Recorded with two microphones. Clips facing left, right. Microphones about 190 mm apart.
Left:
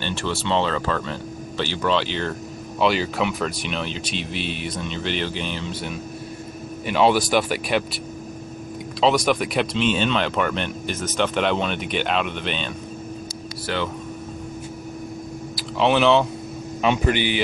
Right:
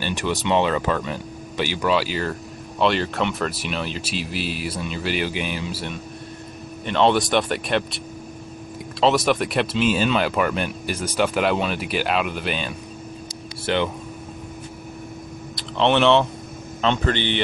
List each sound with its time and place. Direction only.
0.0 s speech: 15° right (ahead or behind)
6.9 s speech: 5° left (ahead or behind)
9.0 s speech: centre (ahead or behind)
13.7 s speech: 20° right (ahead or behind)
15.5 s speech: 5° left (ahead or behind)